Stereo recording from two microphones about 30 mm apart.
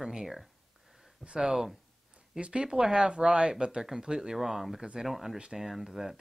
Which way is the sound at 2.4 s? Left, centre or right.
Right.